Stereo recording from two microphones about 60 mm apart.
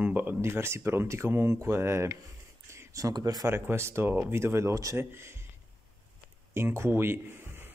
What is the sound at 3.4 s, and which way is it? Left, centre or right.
Speech, right.